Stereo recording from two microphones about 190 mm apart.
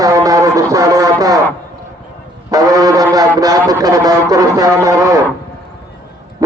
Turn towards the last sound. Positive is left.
turn(degrees=-15)  # may be behind; listen again after turning